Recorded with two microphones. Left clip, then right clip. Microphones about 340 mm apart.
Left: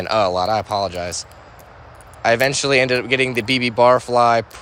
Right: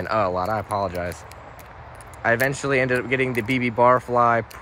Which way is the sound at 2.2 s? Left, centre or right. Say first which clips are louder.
Left 5 dB; centre.